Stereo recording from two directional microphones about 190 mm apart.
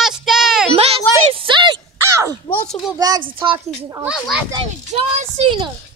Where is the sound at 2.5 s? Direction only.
10° left (ahead or behind).